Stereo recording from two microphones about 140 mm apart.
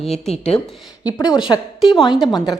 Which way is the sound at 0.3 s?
50° left (ahead or behind).